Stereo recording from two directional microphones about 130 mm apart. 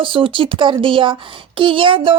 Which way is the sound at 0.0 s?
40° right (ahead or behind).